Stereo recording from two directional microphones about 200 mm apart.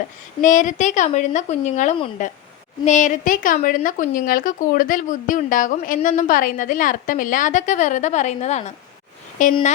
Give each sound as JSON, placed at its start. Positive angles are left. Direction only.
{"t": 0.4, "sound": "speech", "side_deg": 40}